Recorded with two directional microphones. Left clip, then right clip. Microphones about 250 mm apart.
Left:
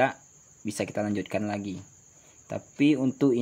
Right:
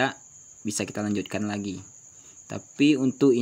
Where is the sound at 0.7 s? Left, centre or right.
Centre.